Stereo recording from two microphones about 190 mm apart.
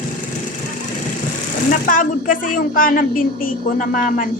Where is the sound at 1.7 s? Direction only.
45° left (ahead or behind).